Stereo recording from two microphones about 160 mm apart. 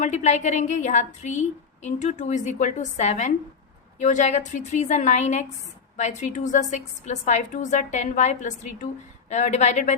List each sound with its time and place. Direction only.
0.0 s a woman's voice: 50° left (ahead or behind)